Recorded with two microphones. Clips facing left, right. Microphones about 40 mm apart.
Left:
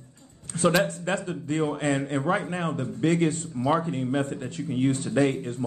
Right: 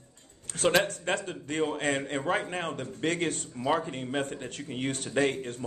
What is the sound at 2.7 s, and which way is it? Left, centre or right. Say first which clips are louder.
Speech: left 9 dB; right.